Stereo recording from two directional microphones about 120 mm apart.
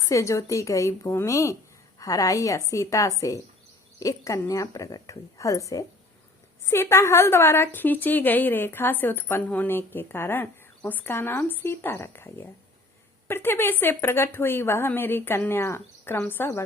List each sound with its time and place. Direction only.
0.0 s a woman's voice: 25° left (ahead or behind)